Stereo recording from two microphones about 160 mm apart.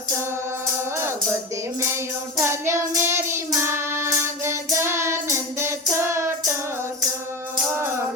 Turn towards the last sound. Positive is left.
turn(degrees=-15)  # may be behind; listen again after turning